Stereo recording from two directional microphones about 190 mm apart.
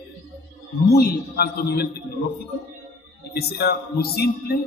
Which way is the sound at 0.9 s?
55° left (ahead or behind).